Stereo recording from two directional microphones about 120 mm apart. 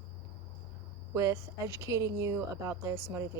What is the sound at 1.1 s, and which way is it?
A woman's voice, 25° right (ahead or behind).